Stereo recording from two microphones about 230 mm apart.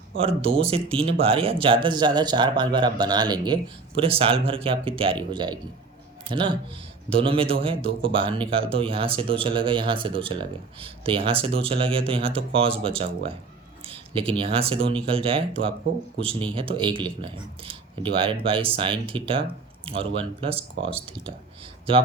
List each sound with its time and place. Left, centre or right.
0.2 s speech: right